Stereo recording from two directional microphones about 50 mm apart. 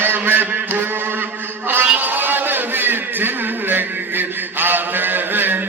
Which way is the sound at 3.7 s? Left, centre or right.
Right.